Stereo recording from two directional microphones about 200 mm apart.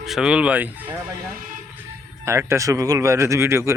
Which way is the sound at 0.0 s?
Centre (ahead or behind).